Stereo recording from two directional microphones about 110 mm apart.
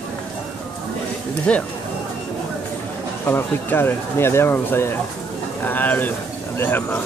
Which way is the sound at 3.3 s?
20° left (ahead or behind).